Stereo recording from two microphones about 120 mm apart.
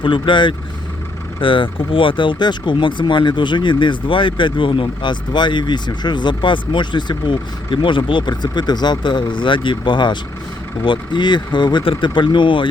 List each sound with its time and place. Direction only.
0.0 s speech: 40° left (ahead or behind)